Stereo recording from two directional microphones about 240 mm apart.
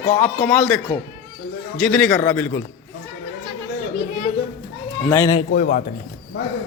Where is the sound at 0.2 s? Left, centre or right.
Centre.